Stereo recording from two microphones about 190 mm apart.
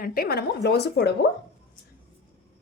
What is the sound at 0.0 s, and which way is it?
Speech, 50° left (ahead or behind).